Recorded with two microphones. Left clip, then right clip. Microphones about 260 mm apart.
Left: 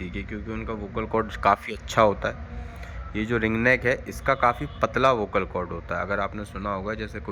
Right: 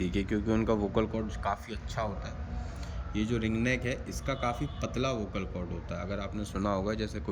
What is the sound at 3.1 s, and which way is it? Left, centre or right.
A man's voice, centre.